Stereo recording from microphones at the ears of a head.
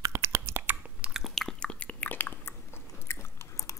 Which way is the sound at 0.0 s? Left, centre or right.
Right.